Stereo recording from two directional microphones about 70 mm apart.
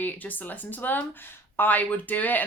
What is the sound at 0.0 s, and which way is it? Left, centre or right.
Speech, left.